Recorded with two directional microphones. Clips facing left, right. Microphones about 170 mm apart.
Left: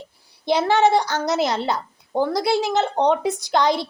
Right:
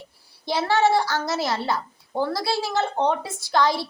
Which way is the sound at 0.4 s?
20° left (ahead or behind).